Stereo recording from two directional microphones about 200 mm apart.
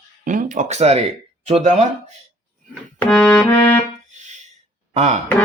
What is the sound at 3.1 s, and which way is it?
Music, 5° left (ahead or behind).